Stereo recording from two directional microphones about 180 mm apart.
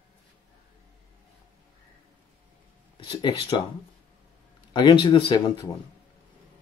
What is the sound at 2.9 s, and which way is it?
Speech, 25° left (ahead or behind).